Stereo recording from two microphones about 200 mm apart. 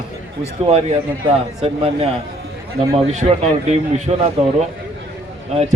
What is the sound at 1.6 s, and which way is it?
Speech, 30° right (ahead or behind).